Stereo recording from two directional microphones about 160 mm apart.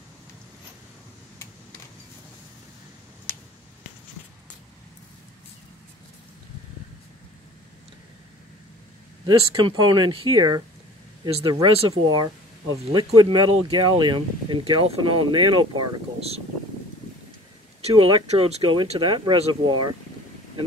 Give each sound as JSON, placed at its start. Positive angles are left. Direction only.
{"t": 3.3, "sound": "finger snapping", "side_deg": 10}
{"t": 9.2, "sound": "speech", "side_deg": -30}
{"t": 11.2, "sound": "speech", "side_deg": -35}
{"t": 17.8, "sound": "speech", "side_deg": -35}